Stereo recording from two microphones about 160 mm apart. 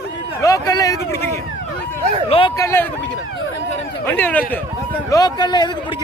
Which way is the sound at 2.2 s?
35° left (ahead or behind).